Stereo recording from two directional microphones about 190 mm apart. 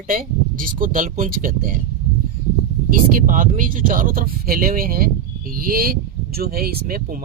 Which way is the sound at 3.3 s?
45° right (ahead or behind).